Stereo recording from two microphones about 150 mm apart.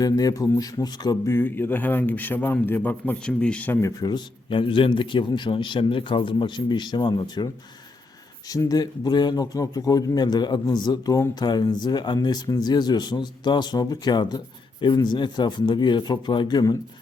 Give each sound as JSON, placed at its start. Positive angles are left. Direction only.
{"t": 0.0, "sound": "a man's voice", "side_deg": 25}